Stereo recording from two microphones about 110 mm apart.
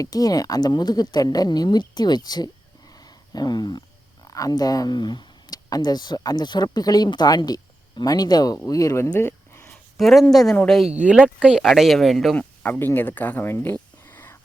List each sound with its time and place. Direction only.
0.0 s speech: 35° left (ahead or behind)
2.9 s a sound: 35° left (ahead or behind)
4.3 s speech: 30° left (ahead or behind)
10.0 s speech: centre (ahead or behind)
10.9 s speech: 10° right (ahead or behind)
12.4 s speech: 15° left (ahead or behind)
14.0 s whispering: 20° left (ahead or behind)